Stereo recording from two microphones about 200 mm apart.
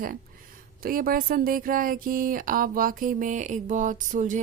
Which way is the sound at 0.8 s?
45° right (ahead or behind).